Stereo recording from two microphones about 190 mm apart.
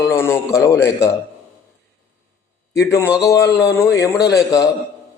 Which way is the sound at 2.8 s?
15° left (ahead or behind).